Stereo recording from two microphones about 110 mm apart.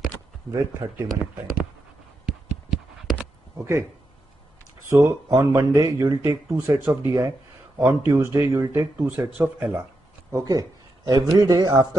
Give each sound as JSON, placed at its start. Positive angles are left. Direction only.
{"t": 0.5, "sound": "speech", "side_deg": -25}
{"t": 1.2, "sound": "speech", "side_deg": -5}
{"t": 2.2, "sound": "clip-clop", "side_deg": -5}
{"t": 4.8, "sound": "speech", "side_deg": -25}
{"t": 10.3, "sound": "speech", "side_deg": -30}